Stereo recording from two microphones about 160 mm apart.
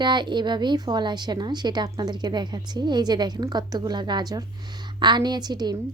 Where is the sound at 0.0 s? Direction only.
30° right (ahead or behind).